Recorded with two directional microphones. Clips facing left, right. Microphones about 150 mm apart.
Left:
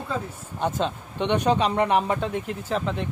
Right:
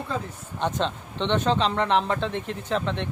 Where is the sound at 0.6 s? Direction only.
10° left (ahead or behind).